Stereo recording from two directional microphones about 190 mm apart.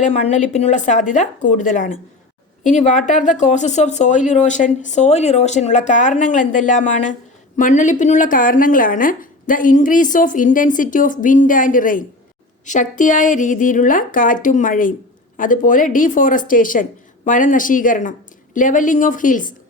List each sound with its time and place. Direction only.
0.0 s a woman's voice: 35° left (ahead or behind)